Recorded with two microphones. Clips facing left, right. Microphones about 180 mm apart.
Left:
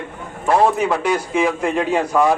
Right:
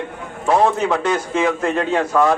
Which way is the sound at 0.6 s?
10° left (ahead or behind).